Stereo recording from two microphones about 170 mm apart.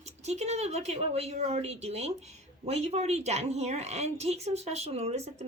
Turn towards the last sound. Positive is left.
turn(degrees=-40)  # may be behind; listen again after turning